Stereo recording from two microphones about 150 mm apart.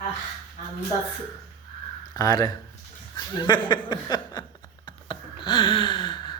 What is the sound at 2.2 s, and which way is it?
Speech, 25° left (ahead or behind).